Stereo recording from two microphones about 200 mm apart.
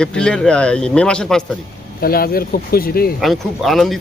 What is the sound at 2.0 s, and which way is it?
Speech, 50° left (ahead or behind).